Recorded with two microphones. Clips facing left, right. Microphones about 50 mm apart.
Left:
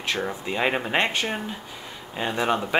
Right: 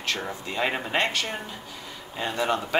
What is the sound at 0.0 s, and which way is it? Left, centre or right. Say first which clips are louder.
Speech: left 3 dB; centre.